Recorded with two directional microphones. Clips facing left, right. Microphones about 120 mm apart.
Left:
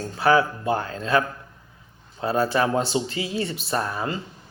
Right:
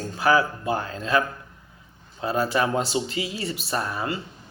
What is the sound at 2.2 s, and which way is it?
A man's voice, 30° left (ahead or behind).